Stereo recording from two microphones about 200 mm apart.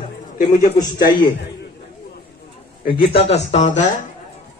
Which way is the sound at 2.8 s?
25° left (ahead or behind).